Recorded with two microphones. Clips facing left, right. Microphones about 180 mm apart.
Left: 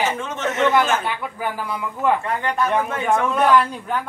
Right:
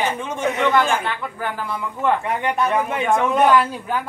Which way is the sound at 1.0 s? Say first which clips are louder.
Even; 5° left (ahead or behind).